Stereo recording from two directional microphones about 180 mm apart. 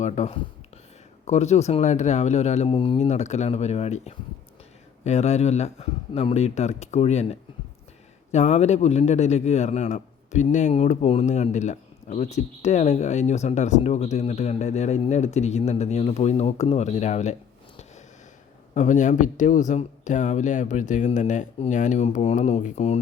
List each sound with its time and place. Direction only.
0.0 s speech: 40° left (ahead or behind)
18.7 s speech: 40° left (ahead or behind)